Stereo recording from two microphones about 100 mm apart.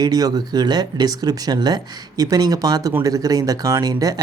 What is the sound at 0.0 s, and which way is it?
Speech, 40° right (ahead or behind).